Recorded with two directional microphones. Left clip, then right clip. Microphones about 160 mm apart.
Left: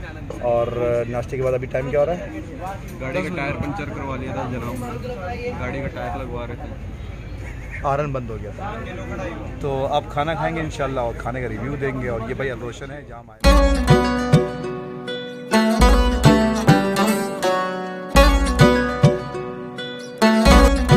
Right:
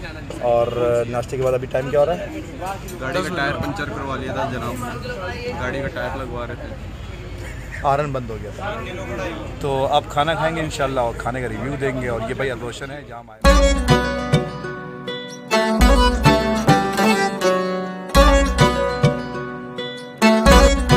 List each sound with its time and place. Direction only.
0.4 s speech: 5° right (ahead or behind)
3.0 s speech: 20° left (ahead or behind)
3.3 s speech: 10° left (ahead or behind)
5.6 s speech: 10° left (ahead or behind)
7.9 s speech: 5° right (ahead or behind)
9.6 s speech: 10° right (ahead or behind)
13.5 s music: centre (ahead or behind)
20.2 s music: centre (ahead or behind)